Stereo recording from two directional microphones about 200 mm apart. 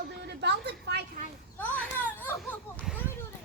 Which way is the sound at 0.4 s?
60° right (ahead or behind).